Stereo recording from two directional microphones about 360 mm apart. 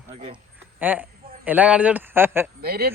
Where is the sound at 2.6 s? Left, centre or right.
Right.